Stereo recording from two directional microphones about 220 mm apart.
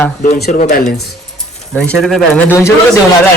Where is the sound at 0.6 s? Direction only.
35° left (ahead or behind).